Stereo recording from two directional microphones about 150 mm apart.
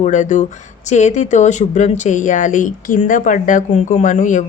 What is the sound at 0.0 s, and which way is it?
Speech, 55° left (ahead or behind).